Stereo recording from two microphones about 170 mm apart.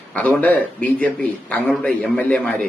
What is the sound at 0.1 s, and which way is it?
A man's voice, 10° left (ahead or behind).